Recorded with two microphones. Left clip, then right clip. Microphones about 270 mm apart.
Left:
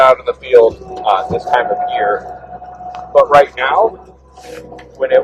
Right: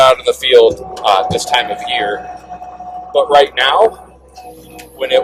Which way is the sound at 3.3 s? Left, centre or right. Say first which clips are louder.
Even; right.